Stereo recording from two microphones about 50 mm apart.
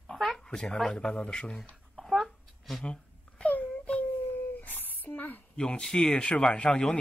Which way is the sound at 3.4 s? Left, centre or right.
Left.